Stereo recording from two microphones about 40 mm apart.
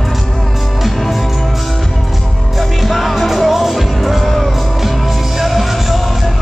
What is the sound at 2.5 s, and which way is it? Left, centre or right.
Music, centre.